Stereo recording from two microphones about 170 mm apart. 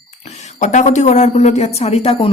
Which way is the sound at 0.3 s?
45° left (ahead or behind).